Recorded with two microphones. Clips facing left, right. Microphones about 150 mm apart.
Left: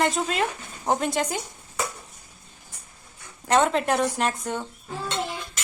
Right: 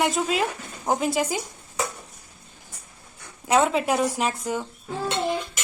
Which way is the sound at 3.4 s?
5° right (ahead or behind).